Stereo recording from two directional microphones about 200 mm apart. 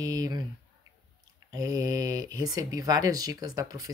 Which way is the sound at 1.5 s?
20° right (ahead or behind).